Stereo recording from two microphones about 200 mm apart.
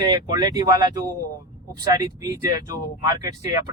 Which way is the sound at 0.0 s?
20° right (ahead or behind).